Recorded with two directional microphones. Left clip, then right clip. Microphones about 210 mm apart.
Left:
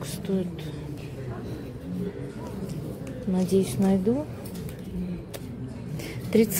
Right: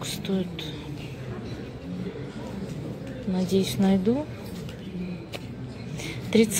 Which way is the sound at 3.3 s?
15° left (ahead or behind).